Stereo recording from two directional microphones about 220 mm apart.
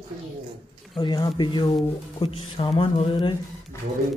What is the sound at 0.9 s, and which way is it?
A man's voice, 20° left (ahead or behind).